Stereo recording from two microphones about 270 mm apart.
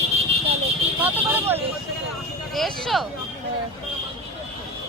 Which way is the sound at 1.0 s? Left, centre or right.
Centre.